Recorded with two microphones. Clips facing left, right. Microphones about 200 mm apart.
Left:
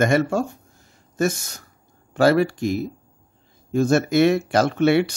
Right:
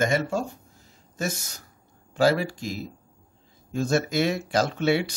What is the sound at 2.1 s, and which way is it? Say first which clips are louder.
Speech: left 5 dB; 60° left (ahead or behind).